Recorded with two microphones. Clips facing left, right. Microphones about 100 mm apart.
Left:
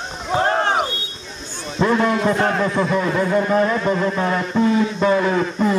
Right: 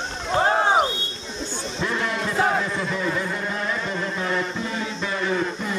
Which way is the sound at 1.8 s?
55° left (ahead or behind).